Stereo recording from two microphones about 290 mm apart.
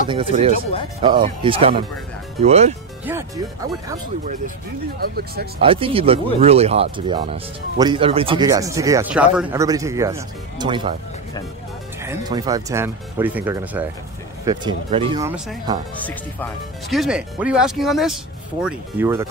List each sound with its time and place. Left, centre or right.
0.1 s speech: centre
3.1 s speech: centre
5.0 s speech: right
5.6 s speech: centre
12.0 s speech: centre
16.9 s speech: centre